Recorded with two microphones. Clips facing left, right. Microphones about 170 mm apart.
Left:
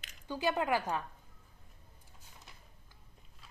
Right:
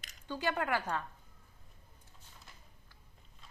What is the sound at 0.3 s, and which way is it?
Speech, 15° left (ahead or behind).